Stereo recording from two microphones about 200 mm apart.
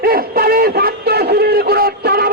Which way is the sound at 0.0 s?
50° right (ahead or behind).